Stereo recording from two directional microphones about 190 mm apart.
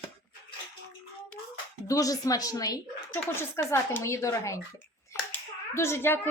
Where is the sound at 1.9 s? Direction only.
20° left (ahead or behind).